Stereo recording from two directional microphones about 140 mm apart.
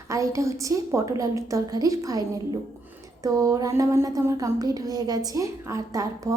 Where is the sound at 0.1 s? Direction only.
20° right (ahead or behind).